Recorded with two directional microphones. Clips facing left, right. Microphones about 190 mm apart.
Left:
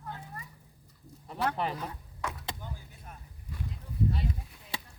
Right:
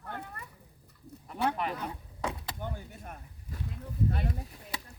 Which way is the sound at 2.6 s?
60° right (ahead or behind).